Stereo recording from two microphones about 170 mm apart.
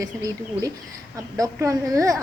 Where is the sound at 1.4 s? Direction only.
20° right (ahead or behind).